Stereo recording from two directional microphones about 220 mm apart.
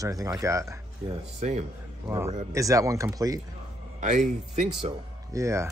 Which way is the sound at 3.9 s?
35° right (ahead or behind).